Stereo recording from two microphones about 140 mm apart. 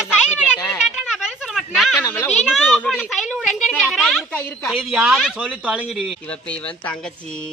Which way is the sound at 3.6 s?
5° left (ahead or behind).